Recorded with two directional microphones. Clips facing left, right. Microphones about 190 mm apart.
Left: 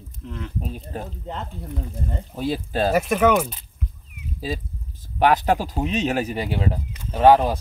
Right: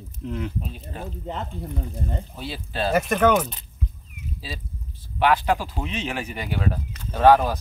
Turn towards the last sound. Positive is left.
turn(degrees=20)  # may be behind; listen again after turning